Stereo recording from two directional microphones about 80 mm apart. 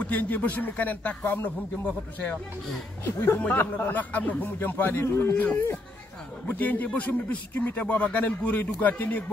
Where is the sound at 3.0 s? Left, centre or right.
Left.